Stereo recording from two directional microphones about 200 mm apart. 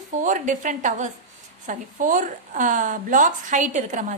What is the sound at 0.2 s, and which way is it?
A woman's voice, 40° right (ahead or behind).